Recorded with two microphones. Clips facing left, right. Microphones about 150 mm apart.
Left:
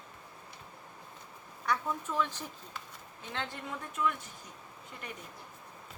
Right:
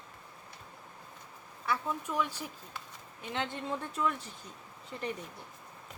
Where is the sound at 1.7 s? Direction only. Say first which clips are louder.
Even; 10° right (ahead or behind); by 4.2 s 30° right (ahead or behind).